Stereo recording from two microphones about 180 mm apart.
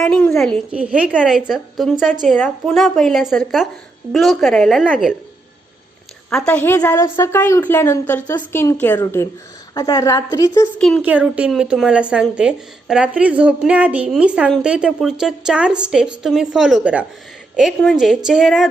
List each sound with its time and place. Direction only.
0.0 s speech: 5° left (ahead or behind)
6.3 s a woman's voice: 5° left (ahead or behind)
10.8 s speech: 5° left (ahead or behind)